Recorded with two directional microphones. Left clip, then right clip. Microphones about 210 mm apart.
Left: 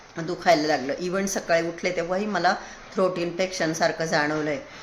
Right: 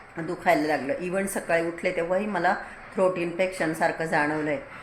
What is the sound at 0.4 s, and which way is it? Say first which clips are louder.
A woman's voice: left 2 dB; 10° left (ahead or behind).